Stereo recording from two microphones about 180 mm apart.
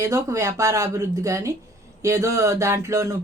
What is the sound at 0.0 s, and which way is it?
Speech, 15° right (ahead or behind).